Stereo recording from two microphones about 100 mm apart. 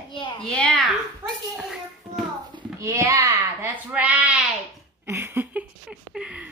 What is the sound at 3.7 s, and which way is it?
Speech, 15° right (ahead or behind).